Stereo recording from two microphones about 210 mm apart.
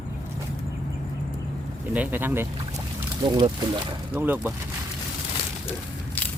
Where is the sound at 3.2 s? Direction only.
25° right (ahead or behind).